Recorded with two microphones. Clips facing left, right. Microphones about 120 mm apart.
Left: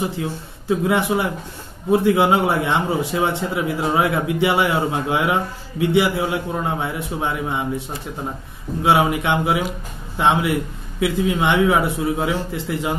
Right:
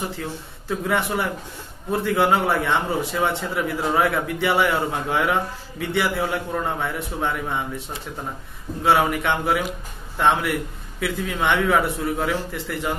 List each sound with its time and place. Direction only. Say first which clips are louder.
0.2 s a man's voice: left 4 dB; 15° left (ahead or behind)
8.8 s a man's voice: left 2 dB; 15° left (ahead or behind)